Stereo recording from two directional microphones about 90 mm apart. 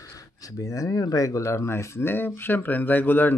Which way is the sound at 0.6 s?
40° left (ahead or behind).